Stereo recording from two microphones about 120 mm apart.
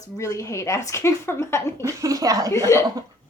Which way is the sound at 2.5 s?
25° left (ahead or behind).